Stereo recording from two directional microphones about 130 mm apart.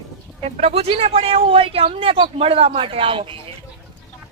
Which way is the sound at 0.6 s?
50° right (ahead or behind).